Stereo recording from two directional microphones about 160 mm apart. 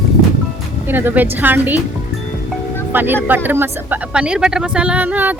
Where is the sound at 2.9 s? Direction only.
10° right (ahead or behind).